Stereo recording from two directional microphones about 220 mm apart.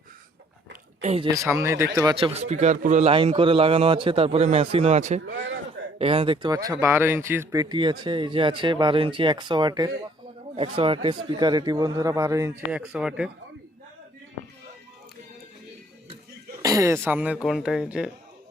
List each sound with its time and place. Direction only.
0.7 s a sound: 30° right (ahead or behind)
1.3 s speech: 15° right (ahead or behind)
16.6 s speech: 15° right (ahead or behind)